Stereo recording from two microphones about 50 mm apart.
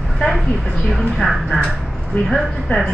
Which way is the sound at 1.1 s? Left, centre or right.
Centre.